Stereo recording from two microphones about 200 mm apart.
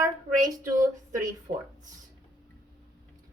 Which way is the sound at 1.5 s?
40° right (ahead or behind).